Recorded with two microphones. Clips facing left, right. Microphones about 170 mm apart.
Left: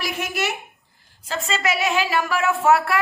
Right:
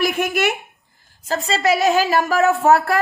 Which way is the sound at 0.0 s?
55° right (ahead or behind).